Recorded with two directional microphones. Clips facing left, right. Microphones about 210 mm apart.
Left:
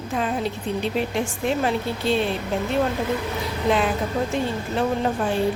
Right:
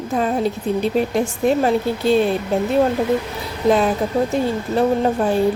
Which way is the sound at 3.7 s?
40° right (ahead or behind).